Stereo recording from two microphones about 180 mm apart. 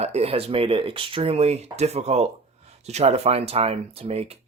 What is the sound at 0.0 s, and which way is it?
Speech, 35° right (ahead or behind).